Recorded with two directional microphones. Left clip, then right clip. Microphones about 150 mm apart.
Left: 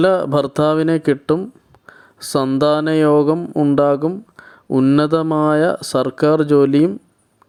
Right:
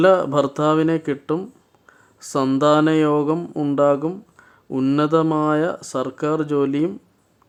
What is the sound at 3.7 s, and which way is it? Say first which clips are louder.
Speech: left 1 dB; 35° left (ahead or behind).